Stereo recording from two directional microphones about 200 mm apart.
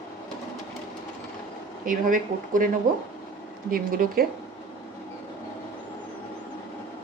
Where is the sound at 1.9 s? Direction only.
40° right (ahead or behind).